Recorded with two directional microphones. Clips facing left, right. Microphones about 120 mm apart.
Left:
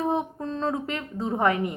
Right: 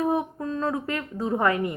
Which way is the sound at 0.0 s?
25° left (ahead or behind).